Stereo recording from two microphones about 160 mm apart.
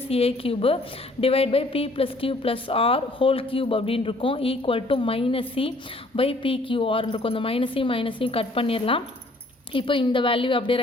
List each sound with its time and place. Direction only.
0.1 s a woman's voice: 35° left (ahead or behind)